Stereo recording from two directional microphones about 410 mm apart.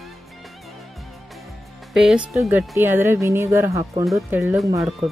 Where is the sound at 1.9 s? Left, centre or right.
Centre.